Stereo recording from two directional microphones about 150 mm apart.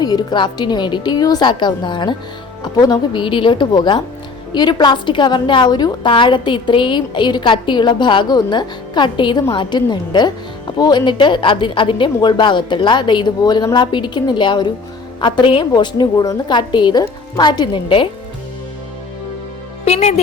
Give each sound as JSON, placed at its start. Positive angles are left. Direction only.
{"t": 0.0, "sound": "a woman's voice", "side_deg": 25}
{"t": 19.8, "sound": "a woman's voice", "side_deg": 45}